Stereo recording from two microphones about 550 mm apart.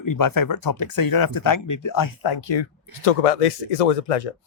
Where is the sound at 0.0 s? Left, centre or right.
Left.